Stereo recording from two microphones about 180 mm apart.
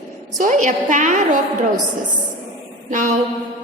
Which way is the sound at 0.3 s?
45° right (ahead or behind).